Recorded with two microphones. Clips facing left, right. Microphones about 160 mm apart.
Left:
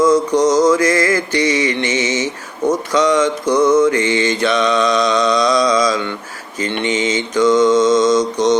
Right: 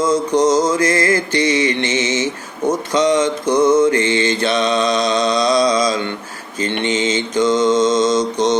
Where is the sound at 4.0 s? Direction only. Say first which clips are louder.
Even; 15° left (ahead or behind).